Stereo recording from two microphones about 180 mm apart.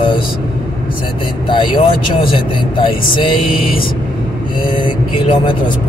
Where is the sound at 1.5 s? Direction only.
25° left (ahead or behind).